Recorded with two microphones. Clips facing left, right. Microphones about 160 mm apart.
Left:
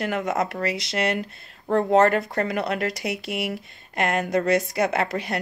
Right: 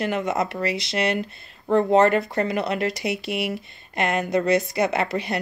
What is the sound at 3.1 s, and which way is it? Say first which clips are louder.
Speech: right 2 dB; 65° right (ahead or behind).